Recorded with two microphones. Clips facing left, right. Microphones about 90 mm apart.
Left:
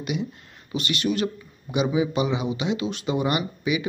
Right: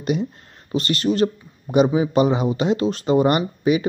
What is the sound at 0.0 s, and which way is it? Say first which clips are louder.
Speech: right 6 dB; 40° right (ahead or behind).